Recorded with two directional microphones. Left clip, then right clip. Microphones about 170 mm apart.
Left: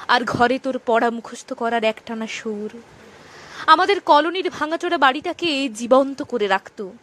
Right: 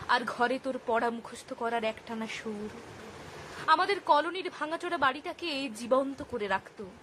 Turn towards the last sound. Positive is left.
turn(degrees=50)  # may be behind; listen again after turning